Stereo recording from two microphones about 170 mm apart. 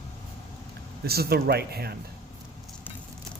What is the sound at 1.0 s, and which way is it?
Speech, 65° right (ahead or behind).